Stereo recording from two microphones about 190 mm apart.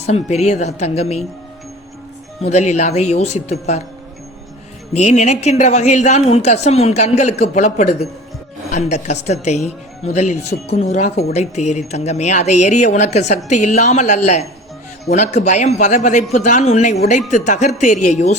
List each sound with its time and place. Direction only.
0.0 s speech: 35° left (ahead or behind)
2.4 s speech: 35° left (ahead or behind)
4.9 s speech: 35° left (ahead or behind)